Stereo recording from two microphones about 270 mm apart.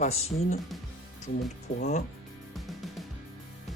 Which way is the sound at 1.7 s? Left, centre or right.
Left.